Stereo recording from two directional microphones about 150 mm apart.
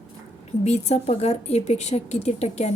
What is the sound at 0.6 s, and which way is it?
A woman's voice, 50° left (ahead or behind).